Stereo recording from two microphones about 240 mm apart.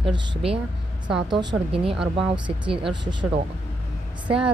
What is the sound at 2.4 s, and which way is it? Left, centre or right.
Speech, centre.